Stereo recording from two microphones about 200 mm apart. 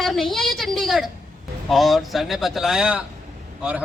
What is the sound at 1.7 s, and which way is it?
A man's voice, centre (ahead or behind).